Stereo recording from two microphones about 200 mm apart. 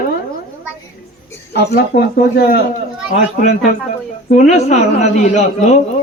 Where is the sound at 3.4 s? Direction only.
40° left (ahead or behind).